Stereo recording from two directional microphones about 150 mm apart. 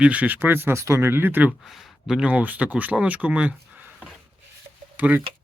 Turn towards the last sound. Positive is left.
turn(degrees=-10)  # may be behind; listen again after turning